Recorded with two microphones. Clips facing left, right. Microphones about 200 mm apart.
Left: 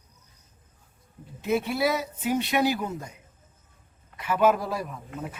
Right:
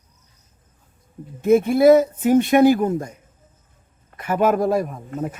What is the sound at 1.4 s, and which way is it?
A man's voice, 50° right (ahead or behind).